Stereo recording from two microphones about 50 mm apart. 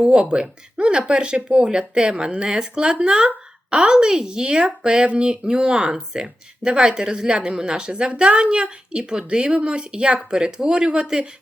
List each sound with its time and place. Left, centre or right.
0.0 s speech: right
11.0 s speech: centre